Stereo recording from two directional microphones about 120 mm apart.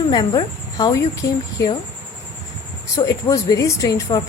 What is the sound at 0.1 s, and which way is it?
Speech, 35° left (ahead or behind).